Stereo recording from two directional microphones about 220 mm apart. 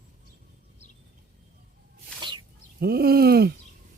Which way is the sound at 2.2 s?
20° right (ahead or behind).